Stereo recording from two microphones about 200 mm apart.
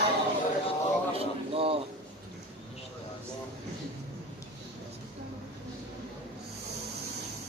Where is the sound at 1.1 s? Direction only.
30° right (ahead or behind).